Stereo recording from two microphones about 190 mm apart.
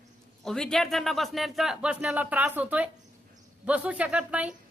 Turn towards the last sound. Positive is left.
turn(degrees=-5)  # may be behind; listen again after turning